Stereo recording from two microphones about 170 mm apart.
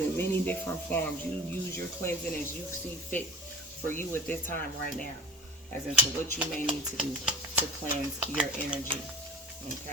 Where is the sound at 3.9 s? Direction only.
15° left (ahead or behind).